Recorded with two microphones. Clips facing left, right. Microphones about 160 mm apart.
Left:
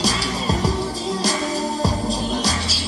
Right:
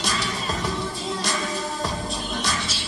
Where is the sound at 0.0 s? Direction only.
35° left (ahead or behind).